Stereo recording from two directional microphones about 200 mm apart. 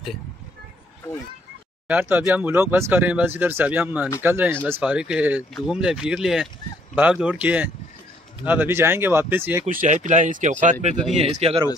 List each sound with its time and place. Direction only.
1.9 s speech: 10° right (ahead or behind)
9.7 s speech: 40° right (ahead or behind)